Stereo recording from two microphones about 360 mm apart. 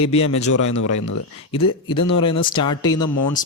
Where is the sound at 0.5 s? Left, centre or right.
Left.